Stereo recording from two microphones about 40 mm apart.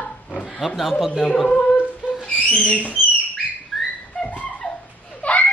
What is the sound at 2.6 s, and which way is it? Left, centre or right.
Speech, left.